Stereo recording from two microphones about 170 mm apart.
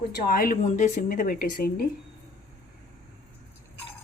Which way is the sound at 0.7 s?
45° left (ahead or behind).